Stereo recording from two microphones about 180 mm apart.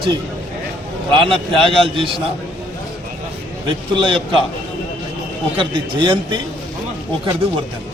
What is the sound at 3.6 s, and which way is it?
Speech, 25° right (ahead or behind).